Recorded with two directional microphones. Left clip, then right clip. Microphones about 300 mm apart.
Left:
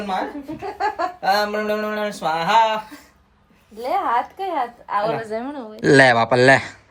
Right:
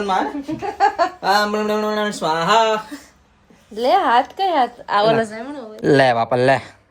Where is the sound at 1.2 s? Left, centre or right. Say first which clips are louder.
Even; centre.